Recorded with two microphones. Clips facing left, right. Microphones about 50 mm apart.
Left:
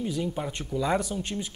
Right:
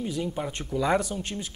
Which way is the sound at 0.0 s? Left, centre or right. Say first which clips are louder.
Even; centre.